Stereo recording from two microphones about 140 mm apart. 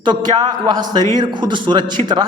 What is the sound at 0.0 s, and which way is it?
A man's voice, 30° right (ahead or behind).